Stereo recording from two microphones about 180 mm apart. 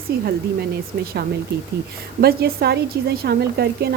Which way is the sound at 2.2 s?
60° right (ahead or behind).